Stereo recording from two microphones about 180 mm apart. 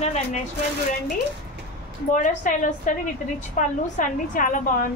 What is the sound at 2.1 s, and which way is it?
A woman's voice, 45° left (ahead or behind).